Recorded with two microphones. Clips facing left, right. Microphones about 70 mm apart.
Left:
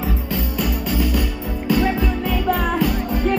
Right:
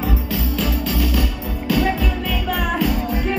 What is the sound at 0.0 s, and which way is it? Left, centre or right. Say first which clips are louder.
Music: right 1 dB; right.